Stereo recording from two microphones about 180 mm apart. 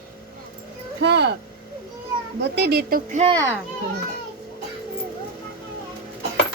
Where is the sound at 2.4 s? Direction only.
70° right (ahead or behind).